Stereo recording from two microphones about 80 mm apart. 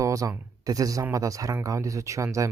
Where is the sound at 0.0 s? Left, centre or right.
Right.